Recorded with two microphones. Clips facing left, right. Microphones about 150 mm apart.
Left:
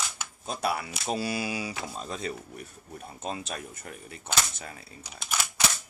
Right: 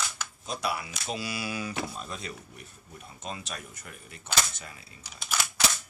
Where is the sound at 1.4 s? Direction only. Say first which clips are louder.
Left 2 dB; 15° left (ahead or behind).